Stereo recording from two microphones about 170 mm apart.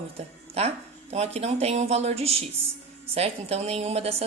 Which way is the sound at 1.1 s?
40° right (ahead or behind).